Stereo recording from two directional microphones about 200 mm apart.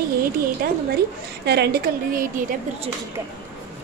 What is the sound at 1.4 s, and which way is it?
Speech, 55° right (ahead or behind).